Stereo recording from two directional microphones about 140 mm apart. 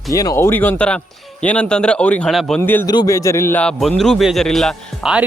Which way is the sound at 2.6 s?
15° left (ahead or behind).